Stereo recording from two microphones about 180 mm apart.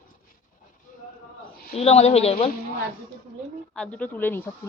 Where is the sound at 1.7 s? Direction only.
35° left (ahead or behind).